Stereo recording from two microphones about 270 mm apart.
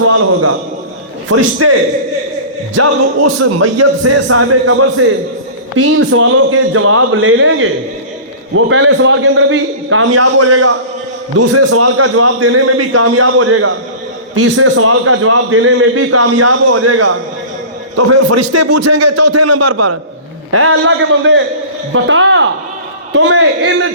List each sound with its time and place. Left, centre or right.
1.3 s a man's voice: right
2.7 s a man's voice: right
20.5 s a man's voice: right